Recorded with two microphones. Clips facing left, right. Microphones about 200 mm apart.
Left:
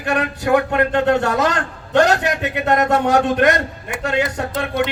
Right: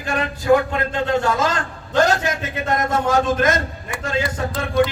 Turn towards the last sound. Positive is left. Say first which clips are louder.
# right 1 dB
turn(degrees=70)  # may be behind; listen again after turning